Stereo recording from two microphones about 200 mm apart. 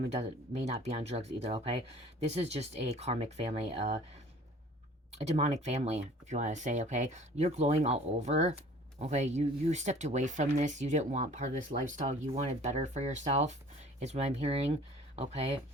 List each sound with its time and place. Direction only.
0.1 s speech: 30° right (ahead or behind)
5.1 s speech: 35° right (ahead or behind)